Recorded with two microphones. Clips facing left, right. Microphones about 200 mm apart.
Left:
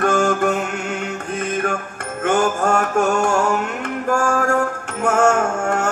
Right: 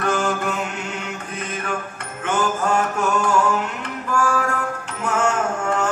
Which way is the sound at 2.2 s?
45° left (ahead or behind).